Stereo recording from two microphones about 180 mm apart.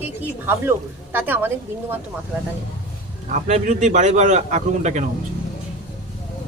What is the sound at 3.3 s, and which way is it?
A man's voice, 40° right (ahead or behind).